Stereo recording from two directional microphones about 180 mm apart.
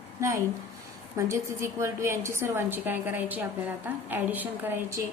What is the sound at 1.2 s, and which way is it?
A woman's voice, 15° right (ahead or behind).